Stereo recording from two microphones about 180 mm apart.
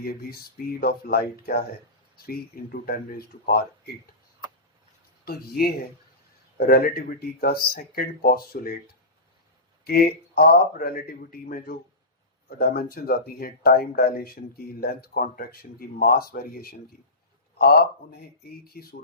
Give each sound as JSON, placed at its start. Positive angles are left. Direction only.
{"t": 0.0, "sound": "speech", "side_deg": 55}
{"t": 5.2, "sound": "speech", "side_deg": 60}
{"t": 9.8, "sound": "speech", "side_deg": 55}
{"t": 18.6, "sound": "speech", "side_deg": 55}